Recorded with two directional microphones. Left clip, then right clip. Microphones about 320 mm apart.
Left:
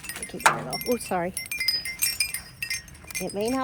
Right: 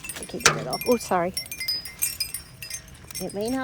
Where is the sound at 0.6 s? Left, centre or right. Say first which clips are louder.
Right 4 dB; centre.